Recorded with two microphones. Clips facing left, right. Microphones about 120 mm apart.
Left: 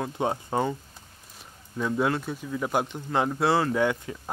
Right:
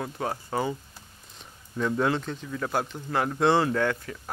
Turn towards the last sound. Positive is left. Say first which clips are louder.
# left 1 dB
turn(degrees=15)  # may be behind; listen again after turning